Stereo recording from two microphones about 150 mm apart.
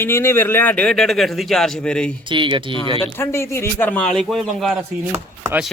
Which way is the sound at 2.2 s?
35° right (ahead or behind).